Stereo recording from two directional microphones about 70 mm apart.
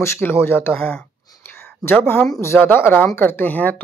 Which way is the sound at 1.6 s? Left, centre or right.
Left.